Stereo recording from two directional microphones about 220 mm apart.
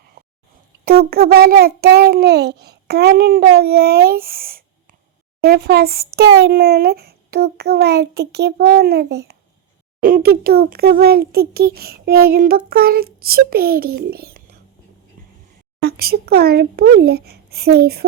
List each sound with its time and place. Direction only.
1.1 s a child's voice: 45° right (ahead or behind)
15.8 s a child's voice: 45° right (ahead or behind)